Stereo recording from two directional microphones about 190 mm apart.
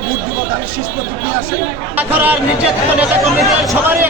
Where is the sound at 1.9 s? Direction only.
10° right (ahead or behind).